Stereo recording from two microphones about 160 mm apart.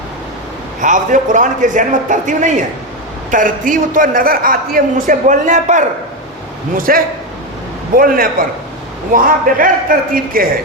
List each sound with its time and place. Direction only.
0.8 s a man's voice: 55° right (ahead or behind)
6.7 s a woman's voice: 60° right (ahead or behind)